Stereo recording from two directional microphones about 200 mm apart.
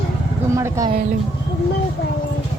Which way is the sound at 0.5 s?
15° right (ahead or behind).